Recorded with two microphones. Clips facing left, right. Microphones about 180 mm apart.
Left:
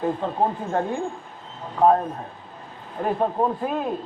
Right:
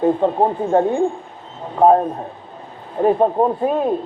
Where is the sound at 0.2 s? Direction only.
40° right (ahead or behind).